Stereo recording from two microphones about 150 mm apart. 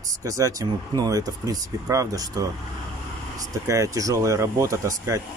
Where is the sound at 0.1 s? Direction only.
20° right (ahead or behind).